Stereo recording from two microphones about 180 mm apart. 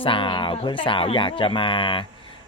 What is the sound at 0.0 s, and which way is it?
Speech, 30° left (ahead or behind).